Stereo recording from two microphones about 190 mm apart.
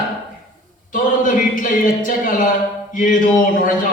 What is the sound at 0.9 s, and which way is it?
A man's voice, 45° left (ahead or behind).